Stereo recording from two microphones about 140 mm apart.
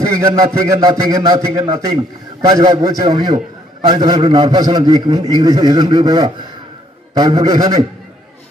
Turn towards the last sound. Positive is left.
turn(degrees=-25)  # may be behind; listen again after turning